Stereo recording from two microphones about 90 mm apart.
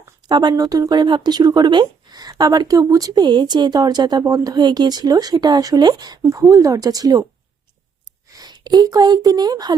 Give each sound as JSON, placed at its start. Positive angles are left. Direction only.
{"t": 0.3, "sound": "speech", "side_deg": -60}
{"t": 0.5, "sound": "speech", "side_deg": -45}
{"t": 1.0, "sound": "speech", "side_deg": -60}
{"t": 8.3, "sound": "speech", "side_deg": -50}